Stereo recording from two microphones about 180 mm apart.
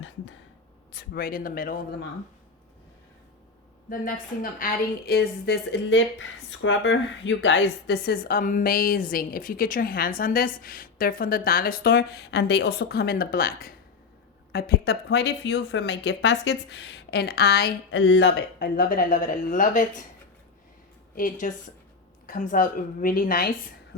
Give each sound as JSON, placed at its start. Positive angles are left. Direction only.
{"t": 0.9, "sound": "a woman's voice", "side_deg": 55}
{"t": 3.8, "sound": "a woman's voice", "side_deg": 50}
{"t": 4.6, "sound": "a woman's voice", "side_deg": 60}
{"t": 21.2, "sound": "a woman's voice", "side_deg": 50}
{"t": 23.9, "sound": "a sound", "side_deg": 70}